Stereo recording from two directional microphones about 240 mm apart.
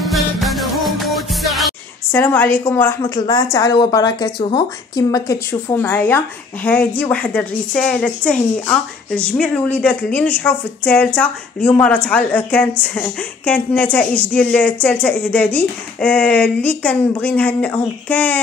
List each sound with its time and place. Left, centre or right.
0.0 s music: centre
2.1 s a woman's voice: centre